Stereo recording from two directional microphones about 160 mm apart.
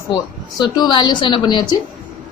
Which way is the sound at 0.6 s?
30° left (ahead or behind).